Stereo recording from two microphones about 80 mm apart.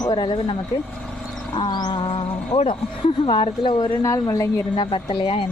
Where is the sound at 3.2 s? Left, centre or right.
Left.